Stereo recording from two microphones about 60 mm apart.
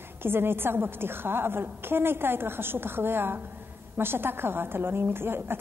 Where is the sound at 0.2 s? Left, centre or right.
Right.